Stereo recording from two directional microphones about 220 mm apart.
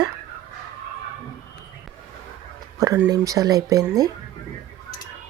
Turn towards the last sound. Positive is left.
turn(degrees=-15)  # may be behind; listen again after turning